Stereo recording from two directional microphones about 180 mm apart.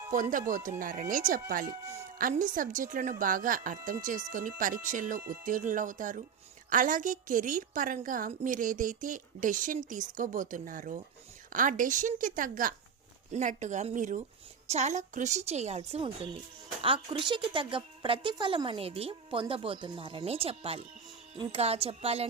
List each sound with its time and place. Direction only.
0.1 s a woman's voice: 50° right (ahead or behind)